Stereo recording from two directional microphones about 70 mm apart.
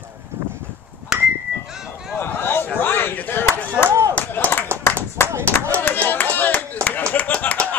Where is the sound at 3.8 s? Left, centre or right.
Right.